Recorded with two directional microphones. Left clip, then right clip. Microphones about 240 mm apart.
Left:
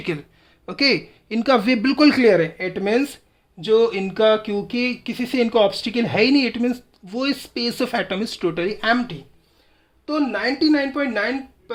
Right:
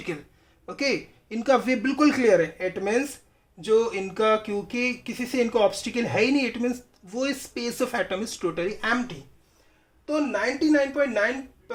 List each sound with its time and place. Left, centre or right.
0.6 s speech: left